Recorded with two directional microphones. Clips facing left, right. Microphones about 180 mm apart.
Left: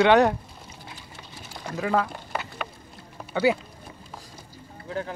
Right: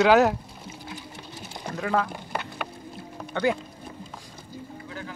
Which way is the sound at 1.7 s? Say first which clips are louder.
Left 1 dB; centre (ahead or behind).